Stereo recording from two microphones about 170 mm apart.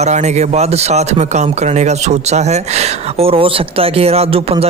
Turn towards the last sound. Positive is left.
turn(degrees=-35)  # may be behind; listen again after turning